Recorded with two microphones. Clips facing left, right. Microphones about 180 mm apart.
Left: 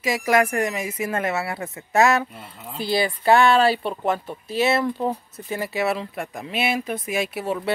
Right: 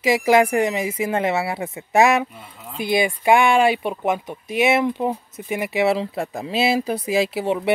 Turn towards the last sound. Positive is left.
turn(degrees=-25)  # may be behind; listen again after turning